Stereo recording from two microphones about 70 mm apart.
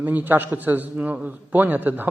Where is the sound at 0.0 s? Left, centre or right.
Right.